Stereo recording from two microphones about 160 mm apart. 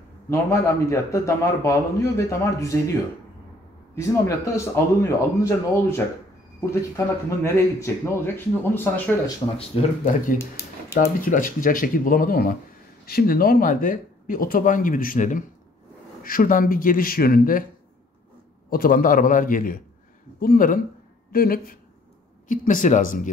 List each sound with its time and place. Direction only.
0.3 s a man's voice: 20° left (ahead or behind)
9.6 s speech: 40° left (ahead or behind)
10.4 s a sound: 15° left (ahead or behind)
11.0 s speech: 55° left (ahead or behind)
18.7 s speech: 65° left (ahead or behind)
22.5 s speech: 55° left (ahead or behind)